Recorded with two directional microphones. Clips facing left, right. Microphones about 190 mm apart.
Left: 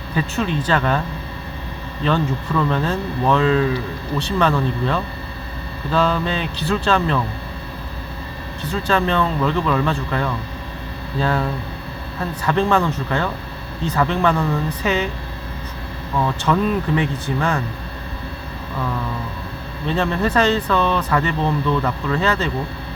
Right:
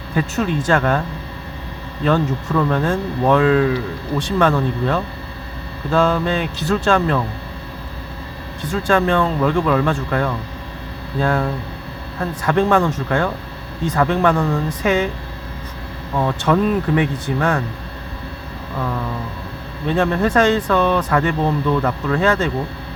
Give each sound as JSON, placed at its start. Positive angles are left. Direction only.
{"t": 0.1, "sound": "speech", "side_deg": -50}
{"t": 2.0, "sound": "speech", "side_deg": -45}
{"t": 4.2, "sound": "speech", "side_deg": -50}
{"t": 8.6, "sound": "speech", "side_deg": -50}
{"t": 16.1, "sound": "speech", "side_deg": -55}
{"t": 18.8, "sound": "speech", "side_deg": -55}